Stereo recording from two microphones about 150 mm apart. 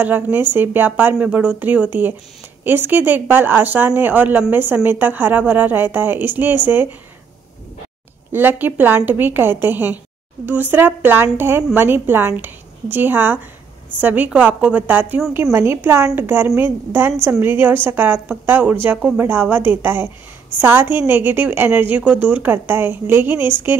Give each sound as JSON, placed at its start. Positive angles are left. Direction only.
{"t": 0.0, "sound": "a woman's voice", "side_deg": -10}
{"t": 8.3, "sound": "a woman's voice", "side_deg": -15}